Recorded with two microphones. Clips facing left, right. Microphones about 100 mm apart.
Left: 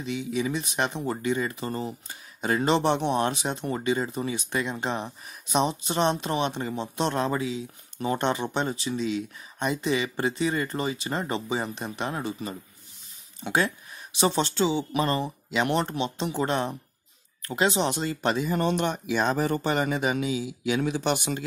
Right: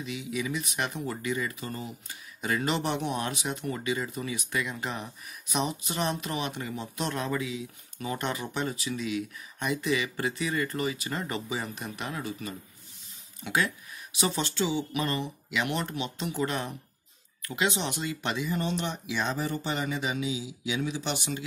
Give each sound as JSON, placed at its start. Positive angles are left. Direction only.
{"t": 0.0, "sound": "speech", "side_deg": 30}